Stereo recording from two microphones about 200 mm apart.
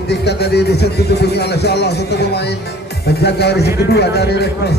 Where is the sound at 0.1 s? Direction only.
55° left (ahead or behind).